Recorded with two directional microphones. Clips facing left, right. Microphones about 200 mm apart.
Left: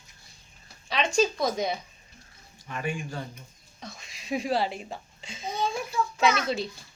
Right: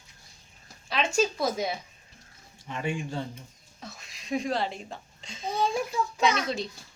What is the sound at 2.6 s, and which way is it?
Speech, 20° right (ahead or behind).